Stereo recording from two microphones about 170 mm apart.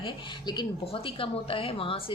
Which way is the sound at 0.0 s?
25° left (ahead or behind).